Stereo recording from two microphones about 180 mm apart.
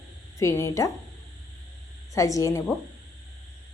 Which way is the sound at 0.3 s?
15° left (ahead or behind).